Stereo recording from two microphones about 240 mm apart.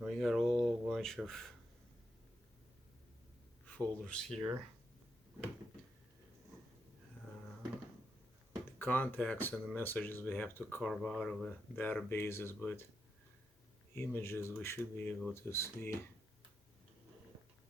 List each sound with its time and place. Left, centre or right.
0.0 s a sound: centre
3.7 s speech: centre
8.8 s speech: centre
13.9 s speech: centre